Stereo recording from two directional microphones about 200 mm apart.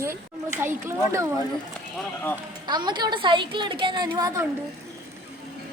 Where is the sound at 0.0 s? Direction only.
15° right (ahead or behind).